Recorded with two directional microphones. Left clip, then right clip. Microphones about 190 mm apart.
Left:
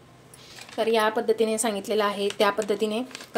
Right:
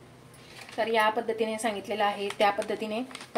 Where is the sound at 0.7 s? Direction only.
40° left (ahead or behind).